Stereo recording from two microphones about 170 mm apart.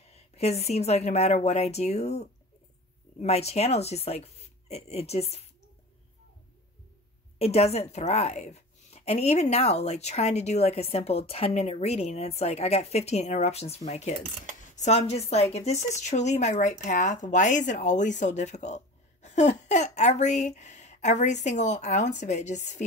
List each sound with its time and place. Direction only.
0.1 s a woman's voice: 40° left (ahead or behind)
7.3 s a woman's voice: 35° left (ahead or behind)